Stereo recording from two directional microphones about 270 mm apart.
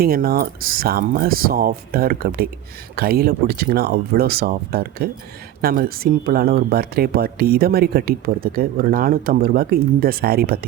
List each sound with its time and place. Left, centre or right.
0.0 s speech: right